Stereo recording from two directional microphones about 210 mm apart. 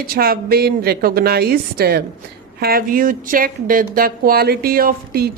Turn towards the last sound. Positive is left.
turn(degrees=-45)  # may be behind; listen again after turning